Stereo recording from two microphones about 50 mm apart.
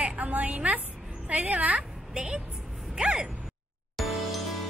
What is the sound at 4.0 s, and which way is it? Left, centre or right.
Music, centre.